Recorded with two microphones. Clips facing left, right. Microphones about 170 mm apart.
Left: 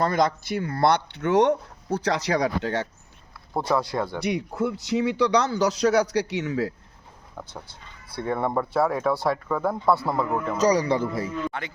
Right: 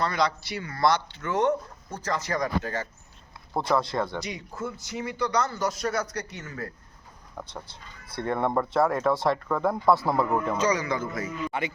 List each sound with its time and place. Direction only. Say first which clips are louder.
0.0 s speech: left 4 dB; 50° left (ahead or behind); by 2.8 s 75° left (ahead or behind)
3.5 s speech: left 1 dB; 5° left (ahead or behind)
4.2 s a man's voice: left 8 dB; 65° left (ahead or behind)
7.4 s speech: even; 5° right (ahead or behind)
8.1 s speech: left 1 dB; 5° left (ahead or behind)
10.6 s a man's voice: left 5 dB; 35° left (ahead or behind)